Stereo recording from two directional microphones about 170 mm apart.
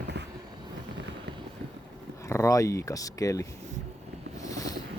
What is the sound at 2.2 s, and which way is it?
Speech, 15° left (ahead or behind).